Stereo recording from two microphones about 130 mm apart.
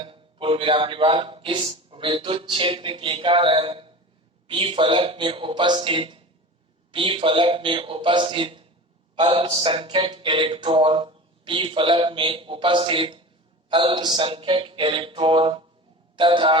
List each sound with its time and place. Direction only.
0.0 s a man's voice: 45° right (ahead or behind)